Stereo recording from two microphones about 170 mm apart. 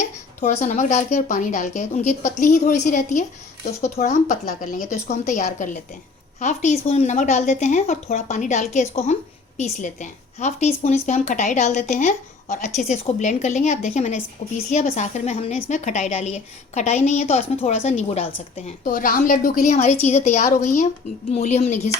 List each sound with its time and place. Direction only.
0.4 s speech: 40° left (ahead or behind)
5.4 s a woman's voice: 55° left (ahead or behind); by 18.7 s 35° left (ahead or behind)
18.9 s a woman's voice: 55° left (ahead or behind)